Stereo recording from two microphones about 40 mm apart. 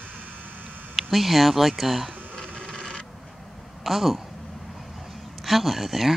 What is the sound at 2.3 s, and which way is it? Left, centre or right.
Printer, centre.